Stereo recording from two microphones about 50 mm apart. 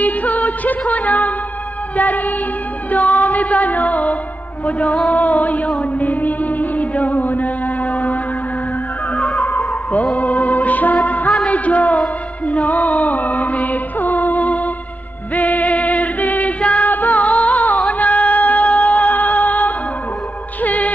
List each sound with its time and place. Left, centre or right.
0.0 s music: left
9.4 s music: left
11.4 s a man's voice: left
12.4 s music: left